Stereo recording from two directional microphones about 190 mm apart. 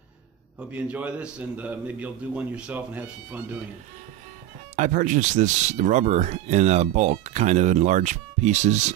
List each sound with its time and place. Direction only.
0.6 s a man's voice: 5° right (ahead or behind)
4.7 s speech: 40° right (ahead or behind)